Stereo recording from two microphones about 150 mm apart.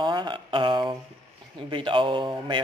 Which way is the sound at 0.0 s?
30° right (ahead or behind).